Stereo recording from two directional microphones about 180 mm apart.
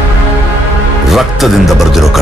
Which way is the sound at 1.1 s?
Centre (ahead or behind).